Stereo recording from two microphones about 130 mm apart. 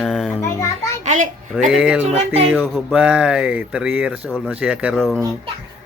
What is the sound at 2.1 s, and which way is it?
Speech, 55° right (ahead or behind).